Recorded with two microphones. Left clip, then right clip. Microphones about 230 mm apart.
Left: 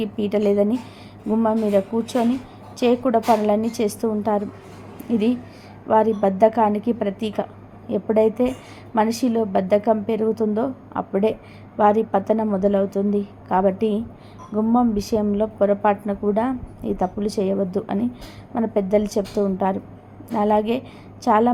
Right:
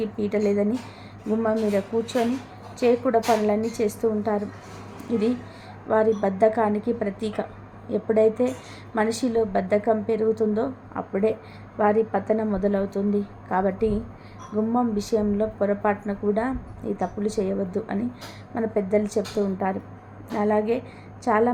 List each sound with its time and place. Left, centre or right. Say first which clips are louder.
0.3 s a woman's voice: left 5 dB; centre
5.9 s a woman's voice: left 3 dB; centre